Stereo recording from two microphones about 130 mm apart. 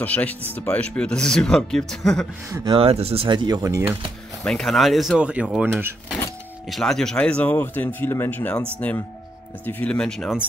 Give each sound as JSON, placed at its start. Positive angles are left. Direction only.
{"t": 0.0, "sound": "speech", "side_deg": 10}
{"t": 2.5, "sound": "speech", "side_deg": -30}
{"t": 2.8, "sound": "speech", "side_deg": -50}
{"t": 4.5, "sound": "speech", "side_deg": 5}
{"t": 6.7, "sound": "speech", "side_deg": 5}
{"t": 9.7, "sound": "speech", "side_deg": 10}